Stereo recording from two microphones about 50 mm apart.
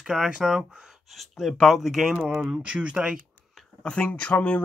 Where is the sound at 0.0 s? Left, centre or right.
Centre.